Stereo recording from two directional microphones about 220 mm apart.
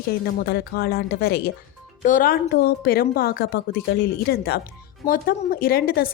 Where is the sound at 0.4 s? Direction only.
45° left (ahead or behind).